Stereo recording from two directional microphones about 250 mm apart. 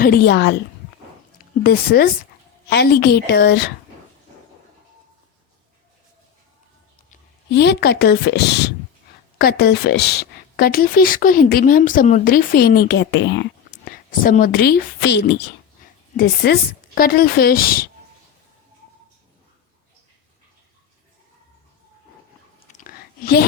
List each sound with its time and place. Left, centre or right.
0.0 s speech: left
7.1 s a woman's voice: left
22.7 s whispering: left